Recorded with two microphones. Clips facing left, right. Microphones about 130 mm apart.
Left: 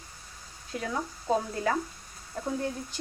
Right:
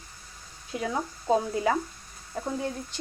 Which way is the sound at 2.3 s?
Centre (ahead or behind).